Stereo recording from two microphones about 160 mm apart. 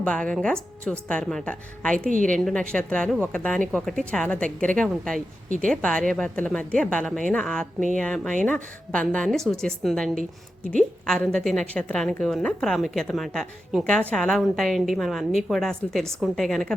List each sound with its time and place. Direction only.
0.0 s a woman's voice: 5° left (ahead or behind)
2.0 s a woman's voice: 55° right (ahead or behind)
2.4 s a woman's voice: 5° left (ahead or behind)